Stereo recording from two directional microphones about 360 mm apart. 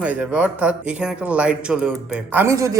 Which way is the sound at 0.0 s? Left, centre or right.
Centre.